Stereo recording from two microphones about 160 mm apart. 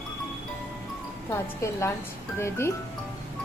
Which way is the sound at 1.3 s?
15° left (ahead or behind).